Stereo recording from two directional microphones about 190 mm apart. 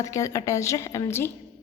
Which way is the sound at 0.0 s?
15° left (ahead or behind).